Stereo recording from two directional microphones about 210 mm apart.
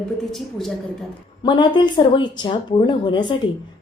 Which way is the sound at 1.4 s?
20° left (ahead or behind).